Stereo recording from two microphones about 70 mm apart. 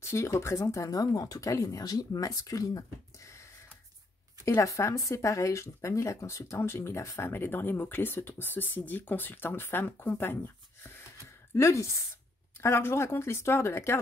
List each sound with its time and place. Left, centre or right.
0.0 s speech: left
4.5 s speech: left
11.5 s a woman's voice: left